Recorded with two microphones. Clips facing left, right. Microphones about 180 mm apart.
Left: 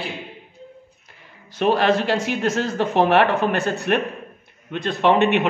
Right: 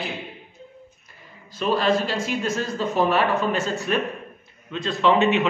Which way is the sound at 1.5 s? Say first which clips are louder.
Left 3 dB; 65° left (ahead or behind).